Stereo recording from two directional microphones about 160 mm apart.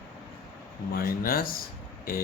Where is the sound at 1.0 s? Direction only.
65° left (ahead or behind).